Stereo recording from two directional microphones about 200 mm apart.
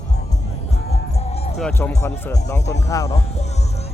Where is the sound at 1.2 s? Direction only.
30° left (ahead or behind).